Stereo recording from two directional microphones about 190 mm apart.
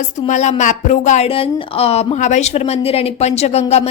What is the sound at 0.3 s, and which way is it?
Speech, 35° left (ahead or behind).